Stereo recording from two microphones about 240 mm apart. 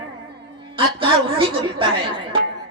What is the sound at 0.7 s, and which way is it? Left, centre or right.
A woman's voice, right.